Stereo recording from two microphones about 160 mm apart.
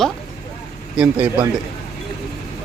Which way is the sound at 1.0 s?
10° right (ahead or behind).